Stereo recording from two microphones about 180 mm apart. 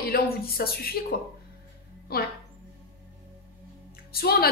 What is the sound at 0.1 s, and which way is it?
Speech, 55° left (ahead or behind).